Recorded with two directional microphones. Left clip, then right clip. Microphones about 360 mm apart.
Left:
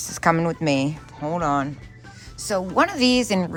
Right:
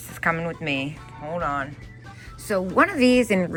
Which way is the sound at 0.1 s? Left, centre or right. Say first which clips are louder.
Left 4 dB; centre.